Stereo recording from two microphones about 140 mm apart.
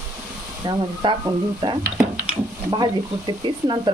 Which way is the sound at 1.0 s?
40° right (ahead or behind).